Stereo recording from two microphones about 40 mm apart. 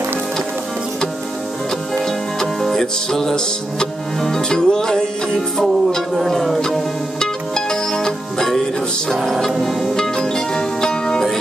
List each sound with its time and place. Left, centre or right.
2.6 s music: centre
7.2 s music: centre
9.9 s music: centre